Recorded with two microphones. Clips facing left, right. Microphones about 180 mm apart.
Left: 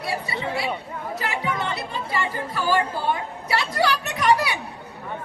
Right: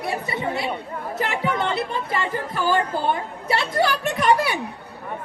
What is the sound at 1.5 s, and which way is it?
Music, 25° right (ahead or behind).